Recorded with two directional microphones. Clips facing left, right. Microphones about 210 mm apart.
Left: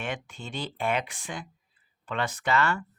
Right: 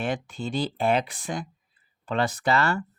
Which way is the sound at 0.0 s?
35° right (ahead or behind).